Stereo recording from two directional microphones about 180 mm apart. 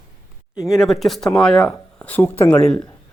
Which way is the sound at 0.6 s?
Centre (ahead or behind).